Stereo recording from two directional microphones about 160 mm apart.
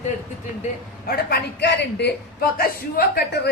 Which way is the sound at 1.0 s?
80° left.